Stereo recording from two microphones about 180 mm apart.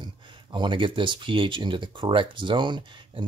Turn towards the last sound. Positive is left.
turn(degrees=-25)  # may be behind; listen again after turning